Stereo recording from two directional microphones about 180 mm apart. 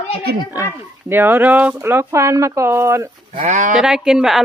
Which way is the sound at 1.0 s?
10° right (ahead or behind).